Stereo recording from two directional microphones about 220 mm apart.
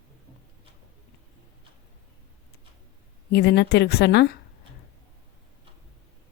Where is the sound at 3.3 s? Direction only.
50° left (ahead or behind).